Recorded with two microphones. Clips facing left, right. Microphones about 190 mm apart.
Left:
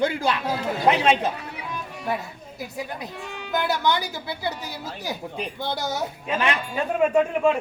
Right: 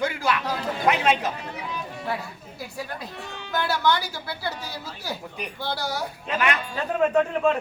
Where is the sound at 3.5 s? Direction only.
15° left (ahead or behind).